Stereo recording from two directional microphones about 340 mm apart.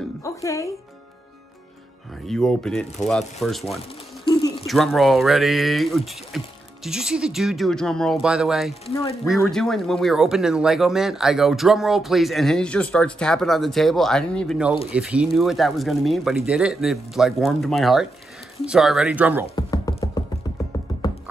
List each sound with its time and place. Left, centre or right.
0.2 s speech: centre
2.2 s speech: centre
4.2 s a sound: centre
4.6 s speech: centre
8.8 s speech: centre
9.2 s speech: centre
19.4 s music: centre